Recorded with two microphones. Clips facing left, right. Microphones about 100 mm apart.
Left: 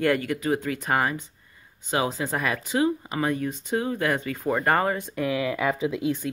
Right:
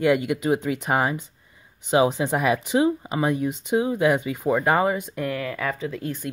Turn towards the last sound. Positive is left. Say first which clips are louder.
# left 4 dB
turn(degrees=5)  # may be behind; listen again after turning